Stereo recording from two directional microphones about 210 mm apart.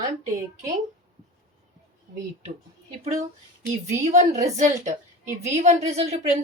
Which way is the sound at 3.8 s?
35° right (ahead or behind).